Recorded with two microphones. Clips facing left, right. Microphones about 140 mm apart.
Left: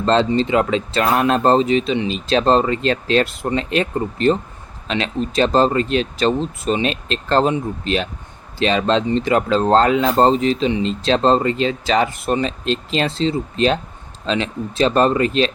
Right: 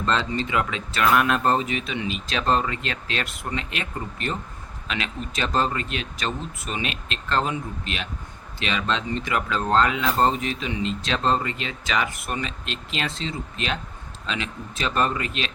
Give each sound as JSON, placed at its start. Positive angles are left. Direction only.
{"t": 0.0, "sound": "speech", "side_deg": 30}